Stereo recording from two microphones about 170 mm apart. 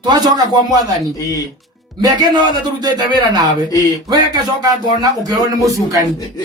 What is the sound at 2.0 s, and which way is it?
A man's voice, 25° right (ahead or behind).